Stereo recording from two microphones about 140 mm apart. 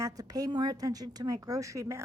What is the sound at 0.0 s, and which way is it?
A woman's voice, 25° right (ahead or behind).